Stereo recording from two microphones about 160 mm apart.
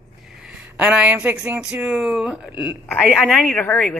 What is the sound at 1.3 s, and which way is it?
Speech, 10° right (ahead or behind).